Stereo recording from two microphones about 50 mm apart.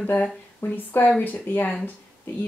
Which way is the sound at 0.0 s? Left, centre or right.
Left.